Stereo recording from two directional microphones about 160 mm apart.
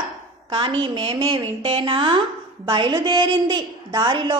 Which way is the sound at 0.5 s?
30° right (ahead or behind).